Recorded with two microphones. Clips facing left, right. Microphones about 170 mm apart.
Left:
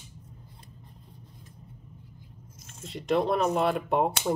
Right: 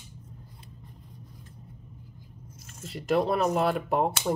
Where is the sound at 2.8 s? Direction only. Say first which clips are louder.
Even; centre (ahead or behind).